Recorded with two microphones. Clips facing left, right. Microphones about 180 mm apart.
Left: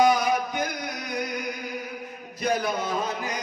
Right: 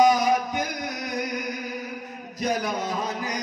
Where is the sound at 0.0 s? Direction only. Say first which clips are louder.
Right 2 dB; 40° right (ahead or behind).